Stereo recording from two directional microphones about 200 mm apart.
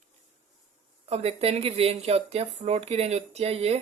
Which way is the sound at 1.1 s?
30° right (ahead or behind).